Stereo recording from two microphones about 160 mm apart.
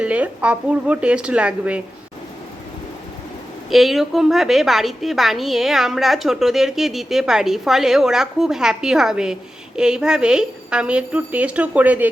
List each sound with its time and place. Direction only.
0.0 s speech: 10° right (ahead or behind)
3.7 s a woman's voice: centre (ahead or behind)